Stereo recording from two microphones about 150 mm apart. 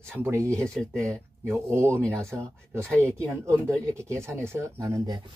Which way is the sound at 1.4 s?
15° right (ahead or behind).